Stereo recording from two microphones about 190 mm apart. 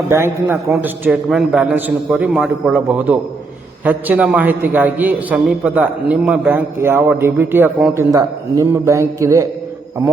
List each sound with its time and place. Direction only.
0.1 s a man's voice: 15° right (ahead or behind)